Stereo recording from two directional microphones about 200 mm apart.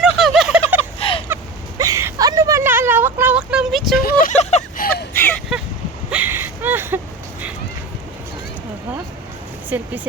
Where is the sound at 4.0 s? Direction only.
45° left (ahead or behind).